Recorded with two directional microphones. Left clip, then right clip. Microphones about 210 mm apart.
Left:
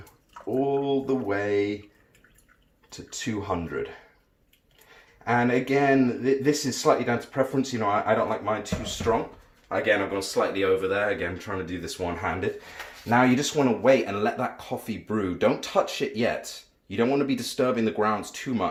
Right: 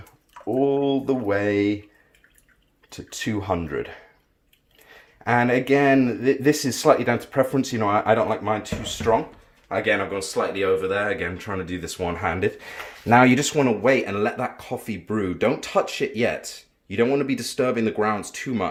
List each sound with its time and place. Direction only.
0.6 s mantra: 55° right (ahead or behind)
2.9 s speech: 55° right (ahead or behind)
5.2 s speech: 55° right (ahead or behind); by 18.7 s 25° right (ahead or behind)